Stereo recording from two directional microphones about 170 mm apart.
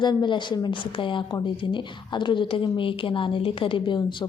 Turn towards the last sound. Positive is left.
turn(degrees=30)  # may be behind; listen again after turning